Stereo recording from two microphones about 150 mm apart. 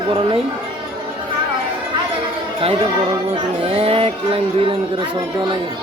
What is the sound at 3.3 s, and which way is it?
Speech, 40° right (ahead or behind).